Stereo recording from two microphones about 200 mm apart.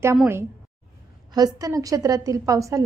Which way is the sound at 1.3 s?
20° right (ahead or behind).